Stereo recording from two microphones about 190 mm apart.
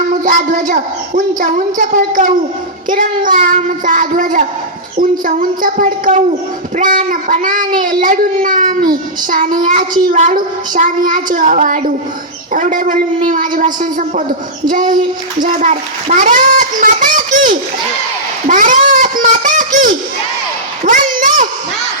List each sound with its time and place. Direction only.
0.1 s speech: 45° right (ahead or behind)
1.4 s child singing: 40° right (ahead or behind)
14.7 s child singing: 45° right (ahead or behind)
15.4 s a child's voice: 45° right (ahead or behind)
18.4 s a sound: 45° right (ahead or behind)